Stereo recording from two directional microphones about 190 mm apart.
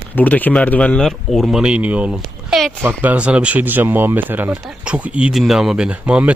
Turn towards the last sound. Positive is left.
turn(degrees=-5)  # may be behind; listen again after turning